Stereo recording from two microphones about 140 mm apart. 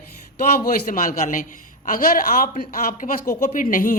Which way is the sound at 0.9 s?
70° left (ahead or behind).